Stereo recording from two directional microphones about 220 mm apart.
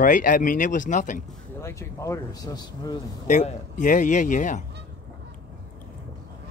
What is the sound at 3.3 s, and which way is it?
Speech, 35° left (ahead or behind).